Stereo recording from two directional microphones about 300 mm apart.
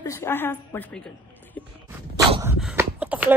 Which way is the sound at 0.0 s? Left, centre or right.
Centre.